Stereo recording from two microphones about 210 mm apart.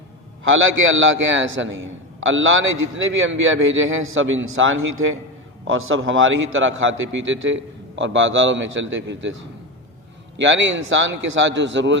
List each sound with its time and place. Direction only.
0.4 s a man's voice: 70° right (ahead or behind)
10.4 s a man's voice: 60° right (ahead or behind)